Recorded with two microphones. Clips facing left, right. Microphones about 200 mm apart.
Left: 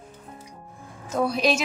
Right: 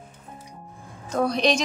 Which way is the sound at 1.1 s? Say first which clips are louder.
Right 1 dB; 5° left (ahead or behind).